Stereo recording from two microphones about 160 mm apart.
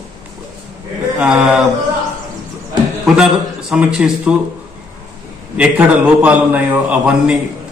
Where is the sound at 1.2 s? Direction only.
5° right (ahead or behind).